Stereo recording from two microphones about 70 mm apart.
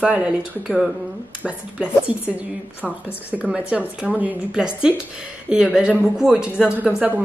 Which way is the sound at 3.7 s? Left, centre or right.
Centre.